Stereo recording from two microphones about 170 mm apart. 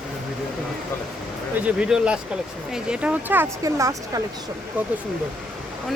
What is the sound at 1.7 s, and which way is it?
A woman's voice, 5° right (ahead or behind).